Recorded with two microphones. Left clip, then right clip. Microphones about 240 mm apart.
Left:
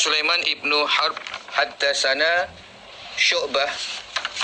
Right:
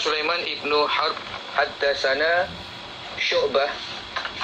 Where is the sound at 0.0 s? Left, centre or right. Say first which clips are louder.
Left 3 dB; left.